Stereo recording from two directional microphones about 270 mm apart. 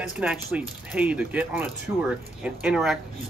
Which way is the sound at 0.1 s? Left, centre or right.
Centre.